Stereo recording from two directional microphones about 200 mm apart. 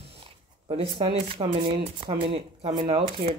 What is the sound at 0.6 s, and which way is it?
Speech, 25° right (ahead or behind).